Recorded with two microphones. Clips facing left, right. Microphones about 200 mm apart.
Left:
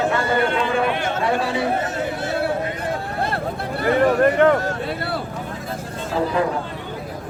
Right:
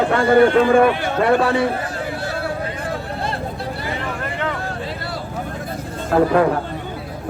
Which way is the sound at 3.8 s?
50° left (ahead or behind).